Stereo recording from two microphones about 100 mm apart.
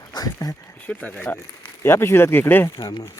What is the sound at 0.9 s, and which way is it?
Speech, 10° left (ahead or behind).